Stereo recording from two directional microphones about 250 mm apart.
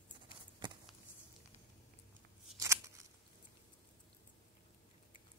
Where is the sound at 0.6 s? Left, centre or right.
Centre.